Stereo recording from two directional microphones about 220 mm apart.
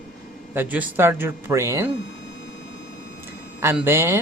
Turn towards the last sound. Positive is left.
turn(degrees=-10)  # may be behind; listen again after turning